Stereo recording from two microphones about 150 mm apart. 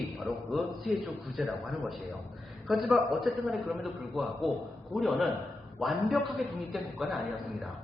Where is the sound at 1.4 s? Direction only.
Centre (ahead or behind).